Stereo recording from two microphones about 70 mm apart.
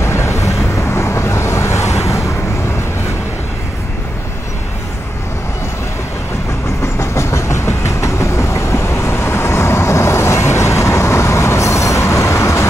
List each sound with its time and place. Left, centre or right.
0.0 s vehicle: left
6.8 s train: left